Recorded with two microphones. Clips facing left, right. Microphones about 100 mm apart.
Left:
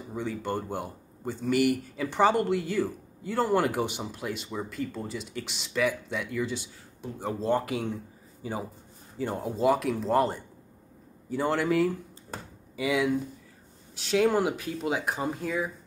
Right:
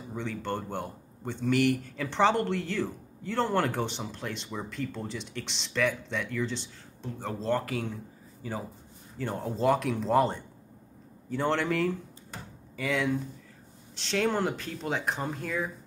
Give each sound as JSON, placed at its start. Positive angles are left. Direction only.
{"t": 0.1, "sound": "a man's voice", "side_deg": 10}